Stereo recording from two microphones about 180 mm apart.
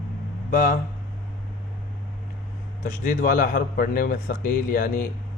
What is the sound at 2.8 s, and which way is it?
A man's voice, 45° left (ahead or behind).